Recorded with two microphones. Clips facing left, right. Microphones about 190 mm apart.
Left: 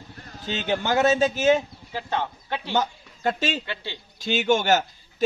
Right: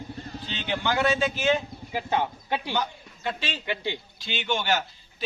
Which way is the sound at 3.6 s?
15° right (ahead or behind).